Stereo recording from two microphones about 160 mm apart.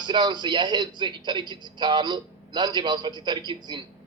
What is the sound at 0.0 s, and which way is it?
A man's voice, 30° right (ahead or behind).